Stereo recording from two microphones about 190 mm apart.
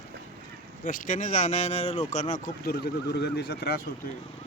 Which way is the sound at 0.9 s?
45° left (ahead or behind).